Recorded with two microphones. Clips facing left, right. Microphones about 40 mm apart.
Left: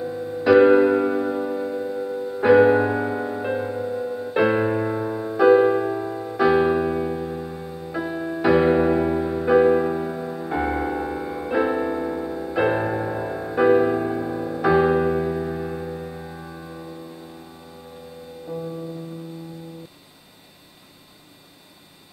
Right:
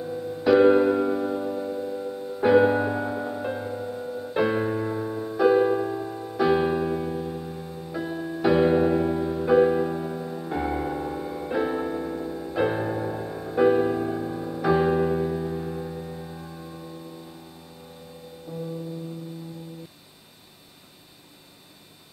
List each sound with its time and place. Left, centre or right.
0.0 s music: left
6.4 s music: centre